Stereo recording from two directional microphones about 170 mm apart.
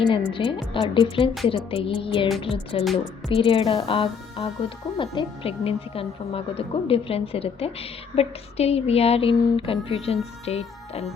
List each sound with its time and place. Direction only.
0.0 s speech: 30° left (ahead or behind)
10.4 s music: 40° left (ahead or behind)